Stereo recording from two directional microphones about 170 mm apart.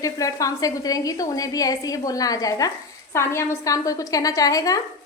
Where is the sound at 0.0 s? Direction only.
20° left (ahead or behind).